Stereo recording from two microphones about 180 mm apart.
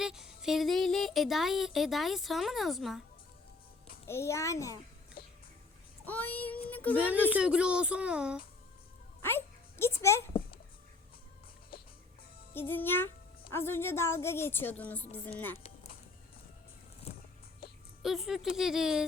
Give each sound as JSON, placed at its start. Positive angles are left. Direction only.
{"t": 0.0, "sound": "speech", "side_deg": -5}
{"t": 4.0, "sound": "a woman's voice", "side_deg": 15}
{"t": 6.1, "sound": "a woman's voice", "side_deg": 10}
{"t": 6.9, "sound": "speech", "side_deg": -10}
{"t": 9.2, "sound": "a child's voice", "side_deg": 10}
{"t": 12.5, "sound": "a woman's voice", "side_deg": 10}
{"t": 17.0, "sound": "a sound", "side_deg": 35}
{"t": 18.0, "sound": "speech", "side_deg": 0}